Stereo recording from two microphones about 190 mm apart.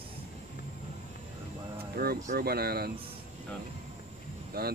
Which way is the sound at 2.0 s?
55° right (ahead or behind).